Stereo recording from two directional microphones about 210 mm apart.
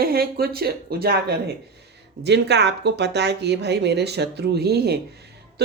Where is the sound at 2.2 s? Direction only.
55° right (ahead or behind).